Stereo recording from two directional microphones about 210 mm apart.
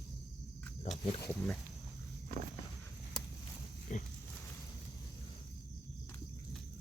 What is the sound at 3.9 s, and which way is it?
Pig, 35° left (ahead or behind).